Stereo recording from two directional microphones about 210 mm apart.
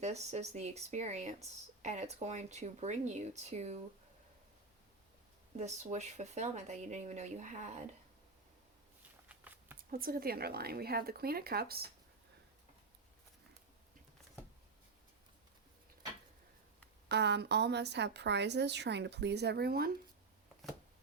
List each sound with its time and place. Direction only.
0.0 s speech: 30° right (ahead or behind)
5.5 s speech: 35° right (ahead or behind)
9.3 s a sound: 10° right (ahead or behind)
9.9 s a woman's voice: 45° right (ahead or behind)
17.1 s a woman's voice: 55° right (ahead or behind)